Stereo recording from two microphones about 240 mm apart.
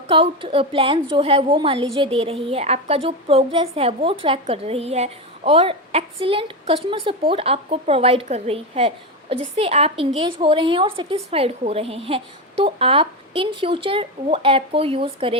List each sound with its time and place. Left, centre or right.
0.1 s a woman's voice: right